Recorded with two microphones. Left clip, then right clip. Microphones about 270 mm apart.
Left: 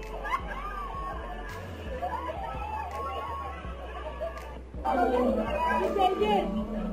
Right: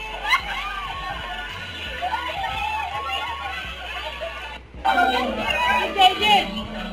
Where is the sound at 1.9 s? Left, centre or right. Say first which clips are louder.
Right 7 dB; centre.